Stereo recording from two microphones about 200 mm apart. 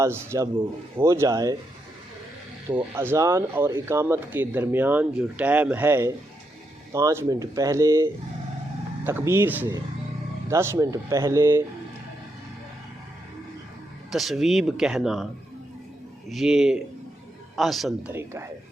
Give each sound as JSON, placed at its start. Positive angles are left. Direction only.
{"t": 0.0, "sound": "speech", "side_deg": -10}
{"t": 2.6, "sound": "speech", "side_deg": -10}
{"t": 14.1, "sound": "speech", "side_deg": 0}
{"t": 16.3, "sound": "speech", "side_deg": 0}
{"t": 18.1, "sound": "speech", "side_deg": -10}